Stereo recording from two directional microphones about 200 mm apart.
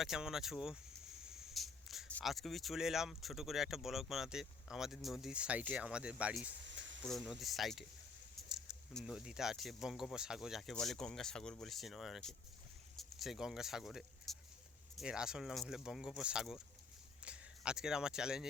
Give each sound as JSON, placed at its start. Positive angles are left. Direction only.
{"t": 0.0, "sound": "speech", "side_deg": -5}
{"t": 6.6, "sound": "a sound", "side_deg": -65}
{"t": 7.0, "sound": "speech", "side_deg": 0}